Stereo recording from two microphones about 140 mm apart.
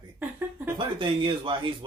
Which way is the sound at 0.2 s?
10° right (ahead or behind).